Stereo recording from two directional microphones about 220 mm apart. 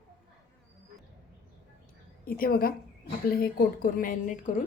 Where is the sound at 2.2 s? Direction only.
40° left (ahead or behind).